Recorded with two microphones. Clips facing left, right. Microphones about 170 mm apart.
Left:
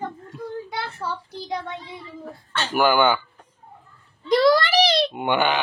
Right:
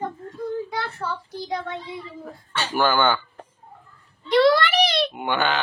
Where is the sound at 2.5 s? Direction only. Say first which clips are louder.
Even; 10° right (ahead or behind).